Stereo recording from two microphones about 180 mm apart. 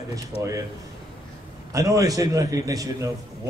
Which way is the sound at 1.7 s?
20° right (ahead or behind).